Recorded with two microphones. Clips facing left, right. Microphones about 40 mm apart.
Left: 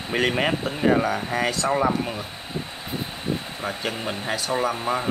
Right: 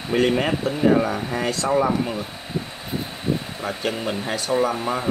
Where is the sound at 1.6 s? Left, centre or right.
Centre.